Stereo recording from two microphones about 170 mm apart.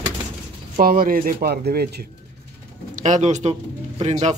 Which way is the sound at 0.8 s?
60° right (ahead or behind).